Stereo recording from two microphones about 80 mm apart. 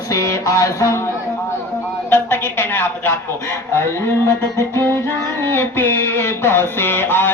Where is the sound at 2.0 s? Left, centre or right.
Left.